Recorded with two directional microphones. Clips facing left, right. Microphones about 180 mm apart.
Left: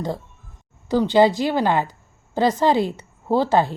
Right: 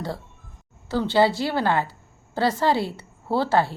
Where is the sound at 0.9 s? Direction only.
15° left (ahead or behind).